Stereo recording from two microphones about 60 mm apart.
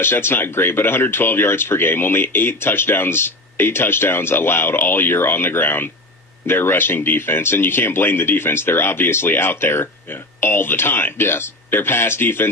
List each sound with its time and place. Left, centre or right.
0.0 s speech: left